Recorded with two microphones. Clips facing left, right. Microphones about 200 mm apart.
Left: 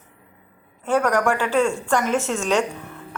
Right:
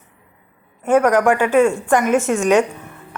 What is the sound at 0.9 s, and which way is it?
A woman's voice, 20° right (ahead or behind).